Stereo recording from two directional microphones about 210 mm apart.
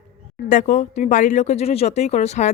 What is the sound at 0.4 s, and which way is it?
Speech, 35° left (ahead or behind).